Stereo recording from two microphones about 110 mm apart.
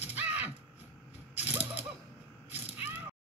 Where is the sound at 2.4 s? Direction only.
15° right (ahead or behind).